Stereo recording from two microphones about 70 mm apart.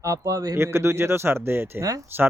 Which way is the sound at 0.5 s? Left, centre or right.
Right.